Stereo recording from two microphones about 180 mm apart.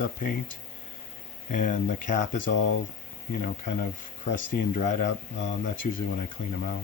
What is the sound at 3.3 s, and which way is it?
Speech, 50° left (ahead or behind).